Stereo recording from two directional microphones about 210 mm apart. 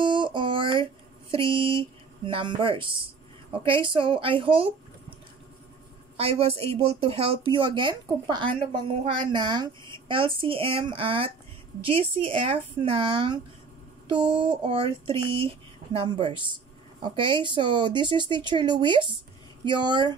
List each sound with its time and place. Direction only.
0.0 s a sound: 20° right (ahead or behind)
1.3 s a woman's voice: 25° right (ahead or behind)
6.1 s a woman's voice: 25° right (ahead or behind)